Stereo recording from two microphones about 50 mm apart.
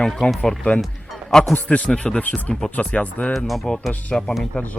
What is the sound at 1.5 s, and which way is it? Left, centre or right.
Speech, left.